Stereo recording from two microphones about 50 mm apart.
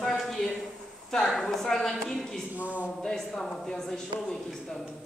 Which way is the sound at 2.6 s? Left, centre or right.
Left.